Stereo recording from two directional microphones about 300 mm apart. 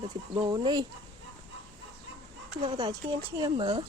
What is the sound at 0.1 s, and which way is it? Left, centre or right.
Speech, centre.